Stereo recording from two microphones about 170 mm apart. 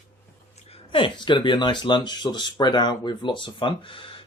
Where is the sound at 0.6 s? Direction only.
35° left (ahead or behind).